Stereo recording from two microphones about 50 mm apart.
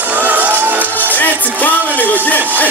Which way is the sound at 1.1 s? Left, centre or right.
Left.